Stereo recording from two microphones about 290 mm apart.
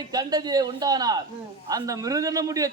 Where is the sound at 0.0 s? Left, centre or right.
Centre.